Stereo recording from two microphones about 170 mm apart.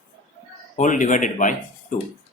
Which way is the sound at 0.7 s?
50° left (ahead or behind).